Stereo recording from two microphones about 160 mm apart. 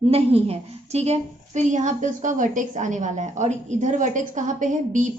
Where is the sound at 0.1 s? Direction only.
40° right (ahead or behind).